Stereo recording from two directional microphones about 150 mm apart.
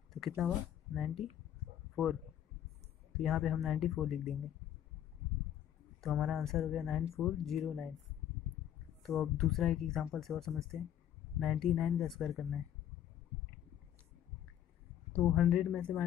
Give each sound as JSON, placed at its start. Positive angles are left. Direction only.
{"t": 0.4, "sound": "speech", "side_deg": -5}
{"t": 3.2, "sound": "speech", "side_deg": 0}
{"t": 5.9, "sound": "speech", "side_deg": 0}
{"t": 9.0, "sound": "speech", "side_deg": 0}
{"t": 15.1, "sound": "speech", "side_deg": 10}
{"t": 15.4, "sound": "speech", "side_deg": -5}
{"t": 15.7, "sound": "speech", "side_deg": 10}